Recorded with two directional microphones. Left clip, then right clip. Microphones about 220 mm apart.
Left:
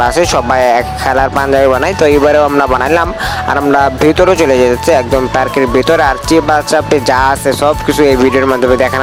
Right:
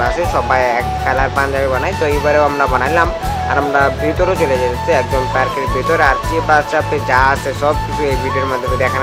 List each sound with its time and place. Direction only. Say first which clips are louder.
0.0 s speech: left 5 dB; 40° left (ahead or behind)